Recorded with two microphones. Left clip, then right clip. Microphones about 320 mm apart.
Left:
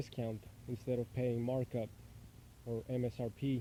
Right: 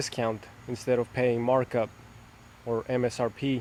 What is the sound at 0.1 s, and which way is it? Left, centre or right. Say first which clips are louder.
Speech: right 14 dB; right.